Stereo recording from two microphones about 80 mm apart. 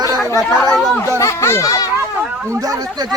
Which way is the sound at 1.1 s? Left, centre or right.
Left.